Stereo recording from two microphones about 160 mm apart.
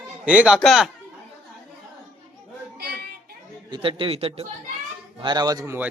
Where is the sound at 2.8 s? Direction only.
90° right.